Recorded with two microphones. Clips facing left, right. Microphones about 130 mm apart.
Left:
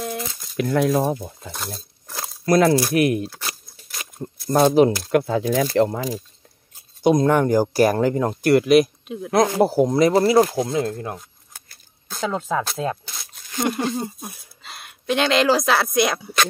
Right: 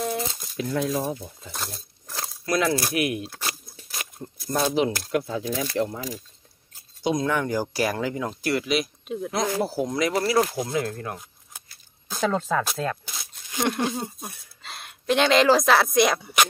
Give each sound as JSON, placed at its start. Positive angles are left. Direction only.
{"t": 0.6, "sound": "speech", "side_deg": 70}
{"t": 1.5, "sound": "coin", "side_deg": 0}
{"t": 2.4, "sound": "speech", "side_deg": 40}
{"t": 4.5, "sound": "speech", "side_deg": 45}
{"t": 5.2, "sound": "speech", "side_deg": 85}
{"t": 7.2, "sound": "speech", "side_deg": 45}
{"t": 9.0, "sound": "speech", "side_deg": 0}
{"t": 9.3, "sound": "speech", "side_deg": 55}
{"t": 9.8, "sound": "speech", "side_deg": 35}
{"t": 12.2, "sound": "speech", "side_deg": 10}
{"t": 13.0, "sound": "a sound", "side_deg": -10}
{"t": 13.6, "sound": "speech", "side_deg": 0}